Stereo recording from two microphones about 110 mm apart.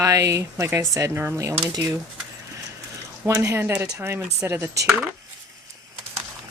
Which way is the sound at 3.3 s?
25° right (ahead or behind).